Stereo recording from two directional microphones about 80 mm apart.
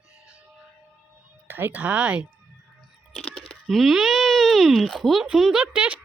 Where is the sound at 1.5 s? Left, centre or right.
Right.